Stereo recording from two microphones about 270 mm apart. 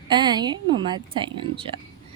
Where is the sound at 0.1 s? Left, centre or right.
Centre.